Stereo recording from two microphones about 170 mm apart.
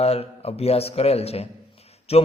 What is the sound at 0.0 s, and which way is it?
A man's voice, 35° left (ahead or behind).